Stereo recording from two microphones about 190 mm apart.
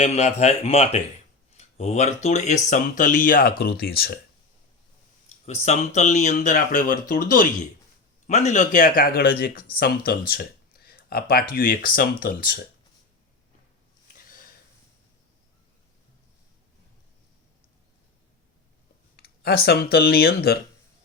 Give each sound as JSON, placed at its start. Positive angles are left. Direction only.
{"t": 0.0, "sound": "speech", "side_deg": 35}
{"t": 5.5, "sound": "speech", "side_deg": 35}
{"t": 14.3, "sound": "sniff", "side_deg": 50}
{"t": 19.1, "sound": "speech", "side_deg": 55}